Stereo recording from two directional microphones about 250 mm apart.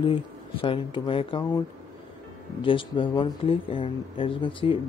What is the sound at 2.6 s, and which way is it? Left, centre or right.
Speech, centre.